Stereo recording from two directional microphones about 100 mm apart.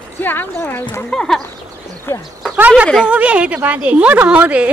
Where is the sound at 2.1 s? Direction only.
20° left (ahead or behind).